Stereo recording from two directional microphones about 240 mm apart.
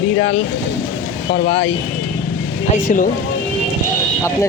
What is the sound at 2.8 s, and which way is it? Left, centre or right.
Speech, left.